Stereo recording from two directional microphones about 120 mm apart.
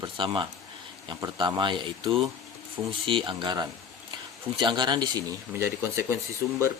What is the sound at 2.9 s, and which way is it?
Speech, 45° right (ahead or behind).